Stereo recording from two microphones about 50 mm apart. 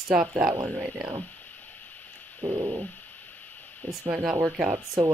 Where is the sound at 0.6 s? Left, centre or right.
Right.